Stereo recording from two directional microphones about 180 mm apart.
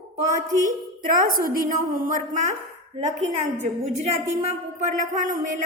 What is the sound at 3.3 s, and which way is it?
A woman's voice, 40° right (ahead or behind).